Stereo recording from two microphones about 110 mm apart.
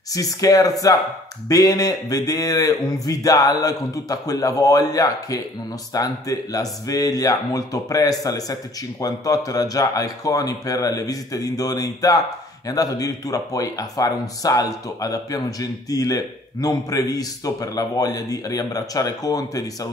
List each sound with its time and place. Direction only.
0.1 s speech: 30° left (ahead or behind)